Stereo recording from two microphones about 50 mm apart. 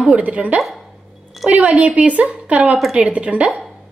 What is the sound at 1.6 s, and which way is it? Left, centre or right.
A woman's voice, right.